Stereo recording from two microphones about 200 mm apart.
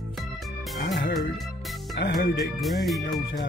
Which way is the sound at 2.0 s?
55° left (ahead or behind).